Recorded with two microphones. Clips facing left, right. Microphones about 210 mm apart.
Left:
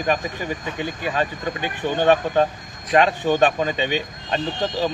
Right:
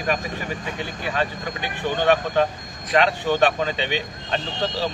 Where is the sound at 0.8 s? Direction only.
15° left (ahead or behind).